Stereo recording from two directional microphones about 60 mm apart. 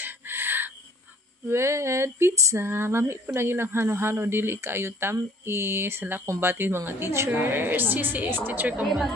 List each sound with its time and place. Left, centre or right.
0.0 s a sound: right
1.5 s female singing: right
2.6 s speech: right
5.4 s female singing: right
6.4 s speech: right
8.8 s a woman's voice: centre